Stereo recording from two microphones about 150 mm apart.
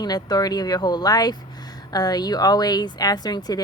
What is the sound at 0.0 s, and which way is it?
Speech, 25° left (ahead or behind).